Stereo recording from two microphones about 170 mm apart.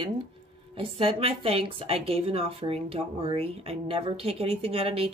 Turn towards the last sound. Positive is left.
turn(degrees=-35)  # may be behind; listen again after turning